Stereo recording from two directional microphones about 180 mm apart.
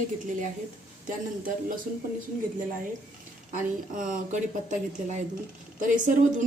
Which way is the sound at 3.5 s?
45° right (ahead or behind).